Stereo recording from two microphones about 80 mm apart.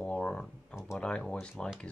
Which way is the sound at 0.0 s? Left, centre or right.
Centre.